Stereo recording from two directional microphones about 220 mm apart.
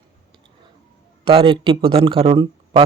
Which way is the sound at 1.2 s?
25° right (ahead or behind).